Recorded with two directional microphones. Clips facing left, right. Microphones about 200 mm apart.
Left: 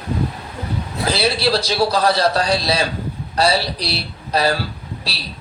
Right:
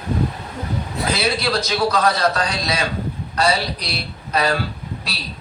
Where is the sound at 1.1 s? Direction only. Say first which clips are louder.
Left 3 dB; 35° left (ahead or behind).